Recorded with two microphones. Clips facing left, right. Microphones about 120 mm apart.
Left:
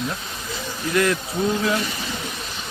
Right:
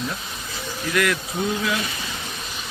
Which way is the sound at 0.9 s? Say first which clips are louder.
Left 2 dB; 25° left (ahead or behind).